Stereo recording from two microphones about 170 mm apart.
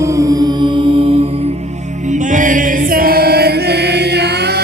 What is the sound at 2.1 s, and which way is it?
Chant, 50° right (ahead or behind).